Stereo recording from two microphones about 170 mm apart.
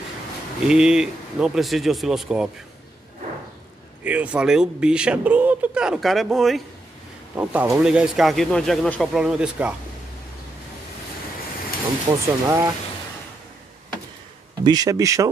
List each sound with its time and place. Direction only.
0.7 s speech: 5° right (ahead or behind)
4.0 s speech: 10° right (ahead or behind)
12.1 s speech: 20° right (ahead or behind)
14.6 s speech: 25° right (ahead or behind)